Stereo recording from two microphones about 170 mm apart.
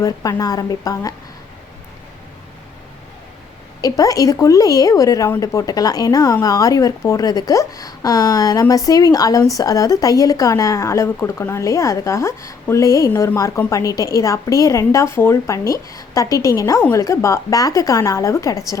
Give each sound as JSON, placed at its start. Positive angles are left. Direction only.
{"t": 0.0, "sound": "speech", "side_deg": 20}
{"t": 3.8, "sound": "speech", "side_deg": 20}